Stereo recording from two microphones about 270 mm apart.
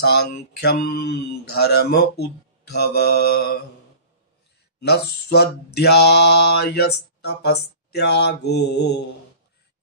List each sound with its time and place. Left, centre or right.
0.0 s mantra: left
4.8 s mantra: left